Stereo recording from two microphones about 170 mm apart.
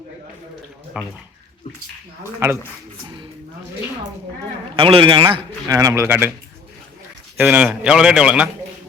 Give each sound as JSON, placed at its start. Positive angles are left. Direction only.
{"t": 0.9, "sound": "speech", "side_deg": -5}
{"t": 4.8, "sound": "a man's voice", "side_deg": -30}
{"t": 7.3, "sound": "speech", "side_deg": -10}